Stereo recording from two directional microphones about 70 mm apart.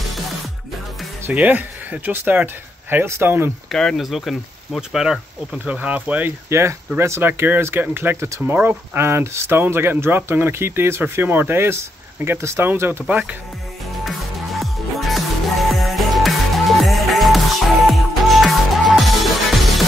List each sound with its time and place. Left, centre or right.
1.3 s speech: right
3.6 s speech: centre
5.8 s speech: right
6.5 s speech: right
13.0 s speech: centre
14.0 s music: centre